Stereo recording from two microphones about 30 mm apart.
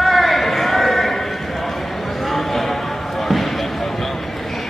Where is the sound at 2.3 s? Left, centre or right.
Centre.